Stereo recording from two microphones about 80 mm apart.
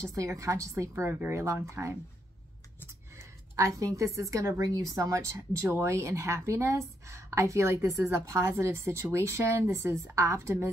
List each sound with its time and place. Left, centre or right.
0.0 s speech: right
1.3 s speech: right
3.2 s speech: right